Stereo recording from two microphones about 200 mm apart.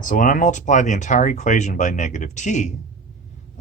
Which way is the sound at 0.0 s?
40° left (ahead or behind).